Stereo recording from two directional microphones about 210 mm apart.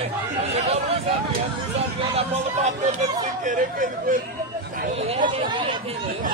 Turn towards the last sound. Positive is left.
turn(degrees=-20)  # may be behind; listen again after turning